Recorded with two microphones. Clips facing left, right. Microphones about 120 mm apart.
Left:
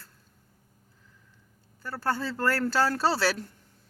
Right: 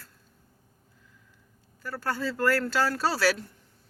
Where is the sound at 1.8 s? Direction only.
30° left (ahead or behind).